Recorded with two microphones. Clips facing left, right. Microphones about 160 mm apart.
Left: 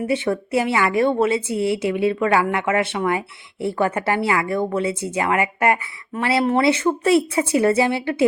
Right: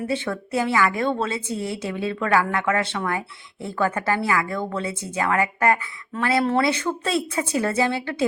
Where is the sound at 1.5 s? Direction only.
70° left (ahead or behind).